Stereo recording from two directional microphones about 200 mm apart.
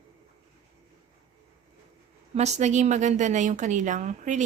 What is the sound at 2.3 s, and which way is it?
A woman's voice, 35° right (ahead or behind).